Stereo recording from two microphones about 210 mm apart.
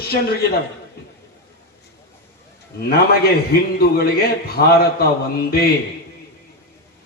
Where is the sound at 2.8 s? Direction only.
50° left (ahead or behind).